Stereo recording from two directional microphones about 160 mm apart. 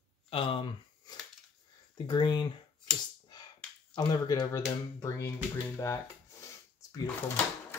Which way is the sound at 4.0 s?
25° left (ahead or behind).